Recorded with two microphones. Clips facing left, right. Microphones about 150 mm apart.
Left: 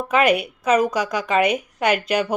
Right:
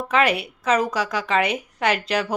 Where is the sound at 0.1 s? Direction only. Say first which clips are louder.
Left 3 dB; 15° left (ahead or behind).